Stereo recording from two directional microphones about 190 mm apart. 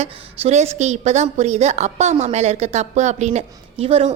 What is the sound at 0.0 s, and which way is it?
A woman's voice, 35° right (ahead or behind).